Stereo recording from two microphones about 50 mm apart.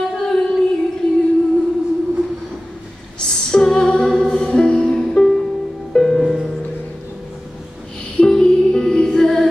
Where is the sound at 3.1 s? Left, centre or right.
Centre.